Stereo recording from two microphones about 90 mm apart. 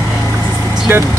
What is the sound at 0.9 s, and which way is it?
Speech, 25° right (ahead or behind).